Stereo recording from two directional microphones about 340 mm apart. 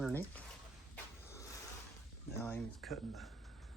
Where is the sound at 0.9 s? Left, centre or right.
Centre.